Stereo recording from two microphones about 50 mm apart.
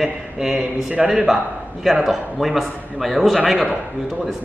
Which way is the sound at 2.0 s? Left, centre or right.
Centre.